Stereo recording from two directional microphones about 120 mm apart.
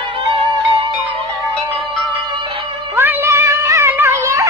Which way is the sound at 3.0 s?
20° right (ahead or behind).